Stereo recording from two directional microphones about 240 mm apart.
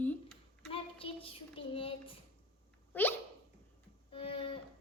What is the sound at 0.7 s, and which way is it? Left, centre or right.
Child singing, left.